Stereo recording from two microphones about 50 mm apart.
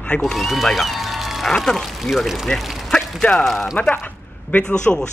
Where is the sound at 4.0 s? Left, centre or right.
Left.